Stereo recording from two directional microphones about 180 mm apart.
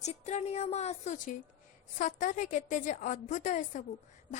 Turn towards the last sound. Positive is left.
turn(degrees=45)  # may be behind; listen again after turning